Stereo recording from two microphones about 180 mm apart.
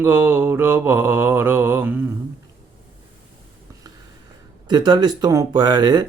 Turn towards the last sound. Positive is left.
turn(degrees=-25)  # may be behind; listen again after turning